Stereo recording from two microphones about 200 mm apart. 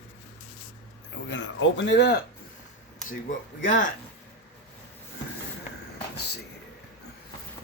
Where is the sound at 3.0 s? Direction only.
40° left (ahead or behind).